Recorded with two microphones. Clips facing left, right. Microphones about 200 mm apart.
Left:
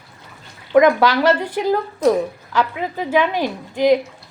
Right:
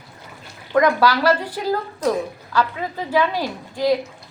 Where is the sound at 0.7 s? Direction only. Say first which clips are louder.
Left 4 dB; 20° left (ahead or behind).